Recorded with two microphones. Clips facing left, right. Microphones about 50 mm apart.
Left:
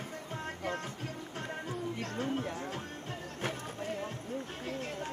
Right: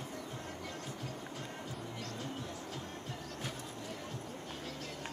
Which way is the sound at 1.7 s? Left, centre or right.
Left.